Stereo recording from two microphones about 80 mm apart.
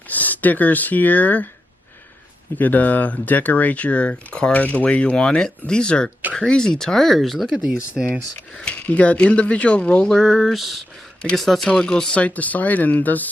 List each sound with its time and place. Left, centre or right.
0.1 s speech: left
2.6 s speech: left; by 8.0 s centre
8.5 s speech: centre
10.2 s speech: centre
11.2 s speech: centre